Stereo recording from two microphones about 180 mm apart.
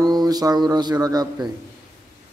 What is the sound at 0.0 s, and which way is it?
Speech, 20° right (ahead or behind).